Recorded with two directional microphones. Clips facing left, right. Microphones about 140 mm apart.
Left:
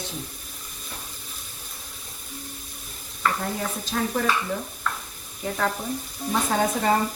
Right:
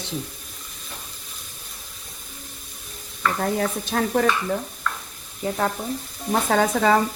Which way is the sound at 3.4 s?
55° right (ahead or behind).